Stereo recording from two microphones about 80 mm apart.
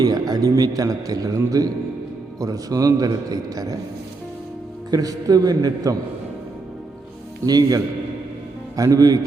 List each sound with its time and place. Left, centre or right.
0.0 s a man's voice: right
4.9 s a man's voice: right
7.4 s a man's voice: right